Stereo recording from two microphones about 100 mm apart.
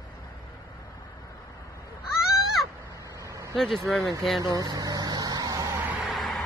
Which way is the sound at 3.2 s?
30° right (ahead or behind).